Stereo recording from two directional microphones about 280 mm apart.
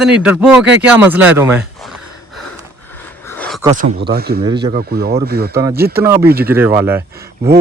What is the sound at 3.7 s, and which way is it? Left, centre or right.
Speech, right.